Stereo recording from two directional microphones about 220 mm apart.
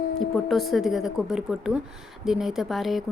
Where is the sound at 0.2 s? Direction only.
Centre (ahead or behind).